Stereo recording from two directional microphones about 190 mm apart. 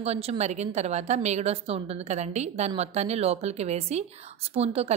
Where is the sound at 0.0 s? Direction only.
35° right (ahead or behind).